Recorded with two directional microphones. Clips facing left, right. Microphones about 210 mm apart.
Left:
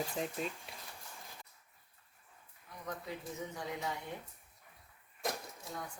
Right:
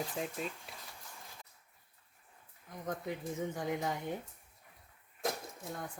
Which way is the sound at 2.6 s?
45° right (ahead or behind).